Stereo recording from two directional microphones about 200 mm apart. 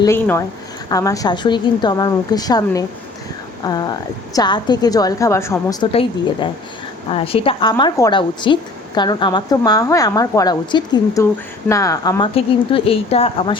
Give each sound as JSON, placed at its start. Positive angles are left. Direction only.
{"t": 0.0, "sound": "a woman's voice", "side_deg": 15}
{"t": 5.9, "sound": "a woman's voice", "side_deg": 30}